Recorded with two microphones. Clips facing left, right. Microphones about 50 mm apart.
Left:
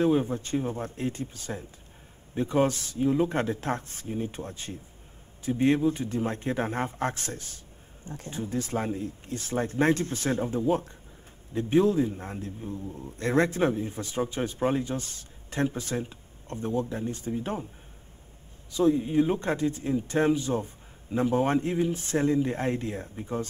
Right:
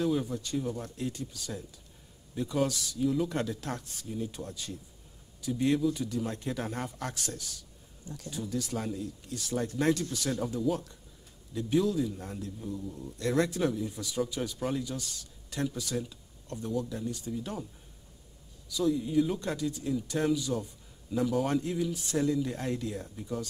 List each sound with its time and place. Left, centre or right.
0.0 s a man's voice: left
18.7 s a man's voice: left